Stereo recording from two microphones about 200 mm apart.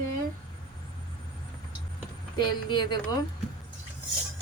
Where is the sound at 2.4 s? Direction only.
20° left (ahead or behind).